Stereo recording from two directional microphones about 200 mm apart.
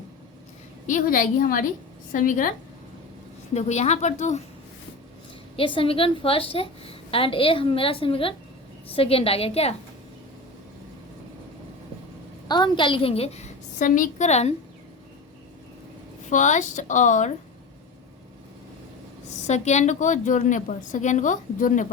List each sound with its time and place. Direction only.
0.9 s a woman's voice: 40° left (ahead or behind)
3.5 s a woman's voice: 35° left (ahead or behind)
5.5 s a woman's voice: 25° left (ahead or behind)
12.5 s a woman's voice: 20° left (ahead or behind)
16.3 s a woman's voice: 40° left (ahead or behind)
19.5 s a woman's voice: 35° left (ahead or behind)